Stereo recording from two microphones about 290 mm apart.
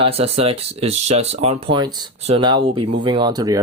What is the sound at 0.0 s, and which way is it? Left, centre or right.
Speech, centre.